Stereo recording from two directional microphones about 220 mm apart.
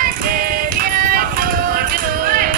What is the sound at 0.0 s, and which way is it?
Music, 40° right (ahead or behind).